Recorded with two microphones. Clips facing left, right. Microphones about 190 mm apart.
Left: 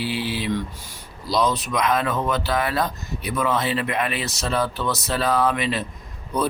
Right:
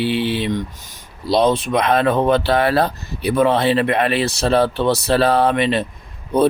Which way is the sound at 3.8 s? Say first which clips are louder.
Right 7 dB; 65° right (ahead or behind).